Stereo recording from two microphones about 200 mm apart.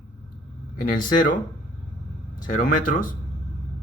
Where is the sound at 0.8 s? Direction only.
45° left (ahead or behind).